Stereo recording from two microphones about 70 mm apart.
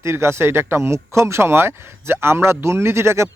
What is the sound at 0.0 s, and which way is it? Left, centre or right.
Speech, right.